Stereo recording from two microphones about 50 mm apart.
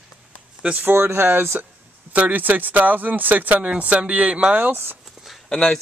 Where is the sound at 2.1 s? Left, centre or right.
Right.